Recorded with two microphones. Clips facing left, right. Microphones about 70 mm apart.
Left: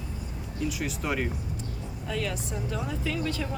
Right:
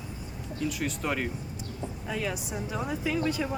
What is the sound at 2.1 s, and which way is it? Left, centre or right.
Speech, centre.